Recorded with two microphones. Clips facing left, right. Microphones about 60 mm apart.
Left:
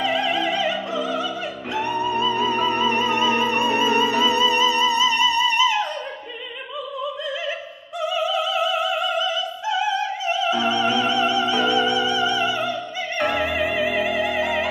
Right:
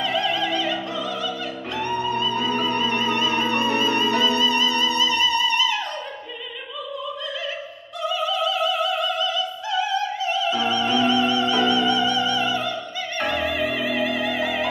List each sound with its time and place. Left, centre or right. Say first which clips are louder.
0.0 s music: left 2 dB; left
8.0 s opera: left 1 dB; centre